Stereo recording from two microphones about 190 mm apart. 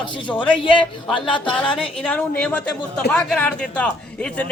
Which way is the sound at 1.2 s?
25° left (ahead or behind).